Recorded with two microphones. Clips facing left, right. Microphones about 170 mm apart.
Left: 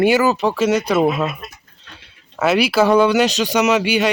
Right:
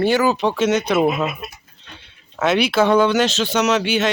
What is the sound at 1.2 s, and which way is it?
Speech, 5° right (ahead or behind).